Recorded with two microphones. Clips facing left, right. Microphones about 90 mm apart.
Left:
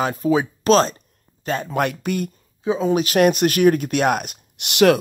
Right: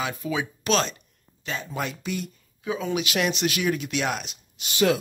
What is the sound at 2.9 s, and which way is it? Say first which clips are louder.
Speech: left 10 dB; 40° left (ahead or behind).